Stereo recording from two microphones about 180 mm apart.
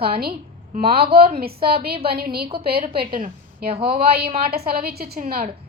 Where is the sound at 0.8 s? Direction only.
30° right (ahead or behind).